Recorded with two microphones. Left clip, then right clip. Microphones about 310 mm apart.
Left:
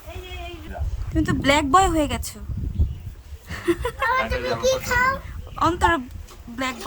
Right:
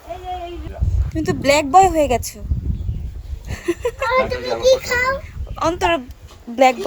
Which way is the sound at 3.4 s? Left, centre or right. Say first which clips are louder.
Right 2 dB; left.